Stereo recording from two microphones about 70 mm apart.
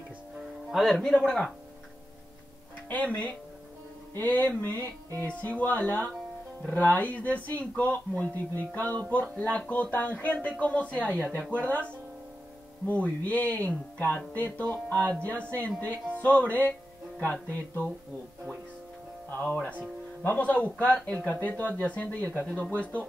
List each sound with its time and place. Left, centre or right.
0.7 s speech: centre
2.9 s speech: left
19.4 s speech: centre